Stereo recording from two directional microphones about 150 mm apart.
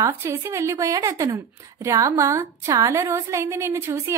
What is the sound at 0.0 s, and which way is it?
A woman's voice, 15° right (ahead or behind).